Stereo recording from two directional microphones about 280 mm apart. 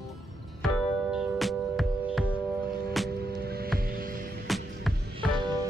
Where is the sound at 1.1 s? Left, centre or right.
Centre.